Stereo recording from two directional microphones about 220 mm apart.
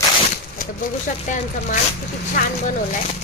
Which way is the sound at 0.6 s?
35° left (ahead or behind).